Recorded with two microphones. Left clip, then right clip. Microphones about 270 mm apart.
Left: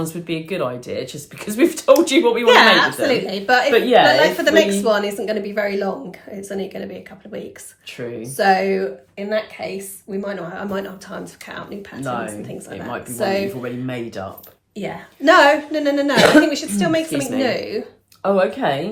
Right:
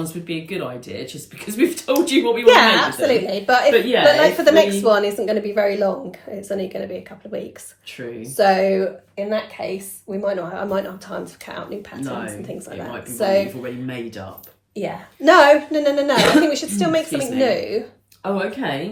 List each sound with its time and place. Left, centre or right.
0.0 s speech: centre
2.5 s speech: centre
13.6 s speech: centre
14.8 s speech: centre
18.2 s speech: centre